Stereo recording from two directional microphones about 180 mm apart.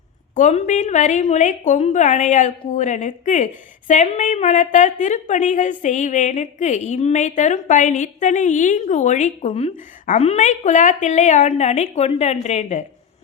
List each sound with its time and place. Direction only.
0.3 s a woman's voice: 40° left (ahead or behind)